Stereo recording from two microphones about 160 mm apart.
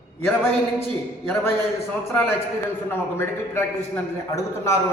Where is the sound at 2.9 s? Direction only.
15° left (ahead or behind).